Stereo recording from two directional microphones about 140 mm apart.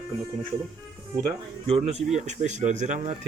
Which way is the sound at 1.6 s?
45° right (ahead or behind).